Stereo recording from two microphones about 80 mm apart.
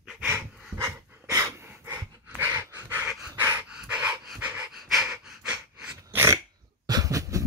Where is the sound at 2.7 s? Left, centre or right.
Right.